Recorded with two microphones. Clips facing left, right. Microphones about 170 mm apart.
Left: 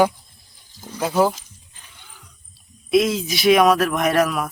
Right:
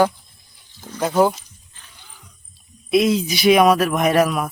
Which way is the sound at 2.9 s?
Centre (ahead or behind).